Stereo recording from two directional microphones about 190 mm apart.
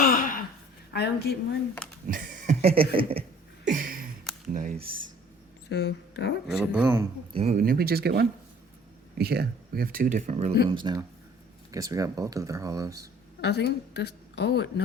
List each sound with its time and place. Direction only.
0.0 s a sound: 45° left (ahead or behind)
0.9 s a woman's voice: 60° left (ahead or behind)
2.0 s a sound: 45° right (ahead or behind); by 3.7 s 30° right (ahead or behind)
3.7 s a sound: 50° right (ahead or behind)
4.8 s speech: 30° right (ahead or behind)
5.6 s speech: 60° left (ahead or behind)
6.5 s speech: 5° right (ahead or behind)
7.3 s speech: 35° right (ahead or behind)
7.6 s speech: 50° right (ahead or behind)
10.7 s speech: 25° right (ahead or behind)
13.4 s a woman's voice: 60° left (ahead or behind)